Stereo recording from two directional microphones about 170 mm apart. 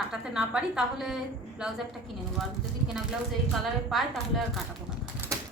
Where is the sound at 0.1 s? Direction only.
5° right (ahead or behind).